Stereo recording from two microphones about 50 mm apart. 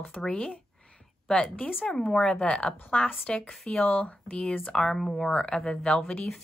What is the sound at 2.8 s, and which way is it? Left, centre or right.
Speech, left.